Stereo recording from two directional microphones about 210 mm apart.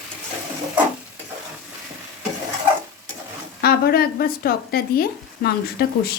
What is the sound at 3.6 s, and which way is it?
Speech, 50° left (ahead or behind).